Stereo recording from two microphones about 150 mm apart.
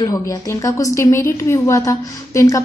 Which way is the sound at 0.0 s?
20° left (ahead or behind).